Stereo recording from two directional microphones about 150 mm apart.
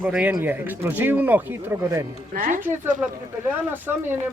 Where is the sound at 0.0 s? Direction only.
10° right (ahead or behind).